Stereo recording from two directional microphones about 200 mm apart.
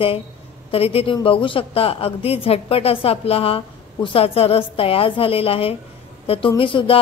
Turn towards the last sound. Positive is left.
turn(degrees=25)  # may be behind; listen again after turning